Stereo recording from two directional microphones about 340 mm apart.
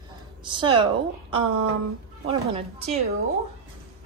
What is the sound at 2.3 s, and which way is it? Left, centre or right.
Speech, centre.